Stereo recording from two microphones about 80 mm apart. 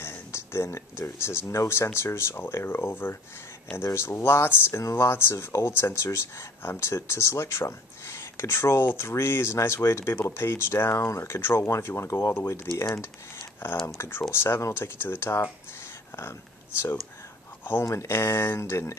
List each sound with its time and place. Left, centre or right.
0.0 s speech: left
13.8 s speech: left
17.6 s speech: left